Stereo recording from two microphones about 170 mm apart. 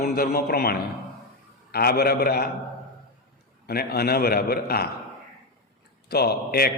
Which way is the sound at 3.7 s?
65° left (ahead or behind).